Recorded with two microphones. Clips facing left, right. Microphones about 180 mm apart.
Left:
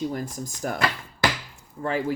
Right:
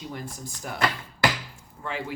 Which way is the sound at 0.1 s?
45° left (ahead or behind).